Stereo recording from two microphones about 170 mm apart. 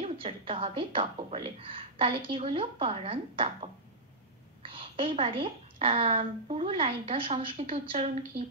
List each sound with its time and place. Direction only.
0.0 s speech: 35° right (ahead or behind)